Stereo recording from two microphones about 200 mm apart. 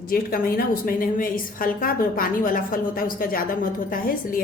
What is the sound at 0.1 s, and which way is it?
A woman's voice, 45° left (ahead or behind).